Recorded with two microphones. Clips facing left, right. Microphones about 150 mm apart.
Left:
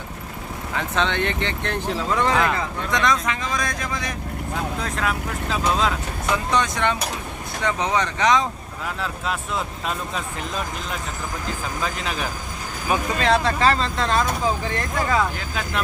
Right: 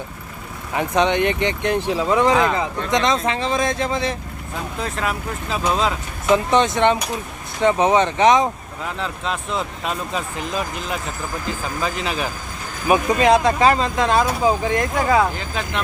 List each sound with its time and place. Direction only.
0.8 s speech: 15° right (ahead or behind)
4.8 s speech: centre (ahead or behind)
6.3 s speech: 25° right (ahead or behind)
9.0 s speech: 5° left (ahead or behind)
12.9 s speech: 15° right (ahead or behind)
15.4 s speech: centre (ahead or behind)